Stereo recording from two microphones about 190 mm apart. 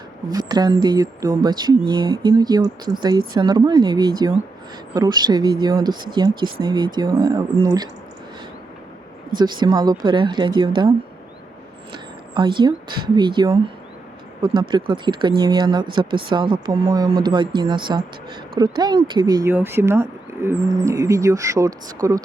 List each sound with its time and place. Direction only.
0.3 s speech: 20° right (ahead or behind)
9.3 s speech: 25° right (ahead or behind)